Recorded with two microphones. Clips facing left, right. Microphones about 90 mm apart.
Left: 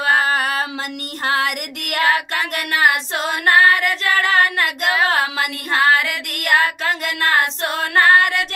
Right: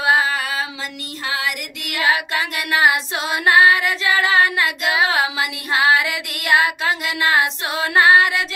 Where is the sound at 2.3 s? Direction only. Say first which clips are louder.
Even; 55° left (ahead or behind).